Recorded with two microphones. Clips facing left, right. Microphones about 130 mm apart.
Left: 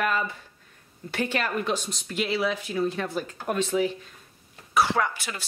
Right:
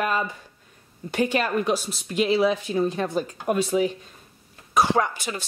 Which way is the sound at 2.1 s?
20° right (ahead or behind).